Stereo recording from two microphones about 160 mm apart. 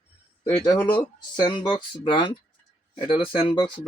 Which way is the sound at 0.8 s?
30° left (ahead or behind).